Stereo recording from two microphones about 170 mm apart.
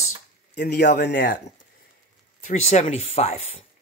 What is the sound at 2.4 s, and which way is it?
Speech, 45° left (ahead or behind).